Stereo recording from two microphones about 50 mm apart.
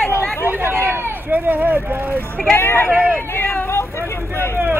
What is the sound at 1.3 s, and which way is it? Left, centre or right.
Speech, right.